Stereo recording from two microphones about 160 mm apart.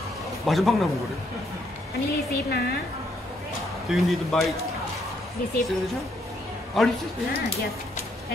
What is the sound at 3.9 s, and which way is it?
Speech, centre (ahead or behind).